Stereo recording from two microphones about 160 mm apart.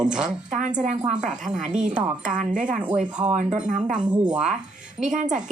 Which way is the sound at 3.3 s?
50° right (ahead or behind).